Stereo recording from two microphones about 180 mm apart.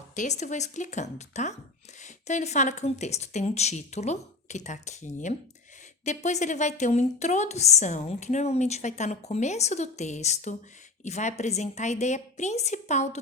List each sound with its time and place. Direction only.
0.2 s a woman's voice: 40° left (ahead or behind)